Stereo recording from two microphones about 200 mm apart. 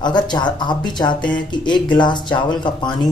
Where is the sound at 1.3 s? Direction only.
20° left (ahead or behind).